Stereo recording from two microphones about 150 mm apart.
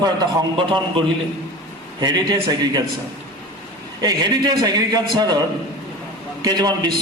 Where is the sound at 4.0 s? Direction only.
25° right (ahead or behind).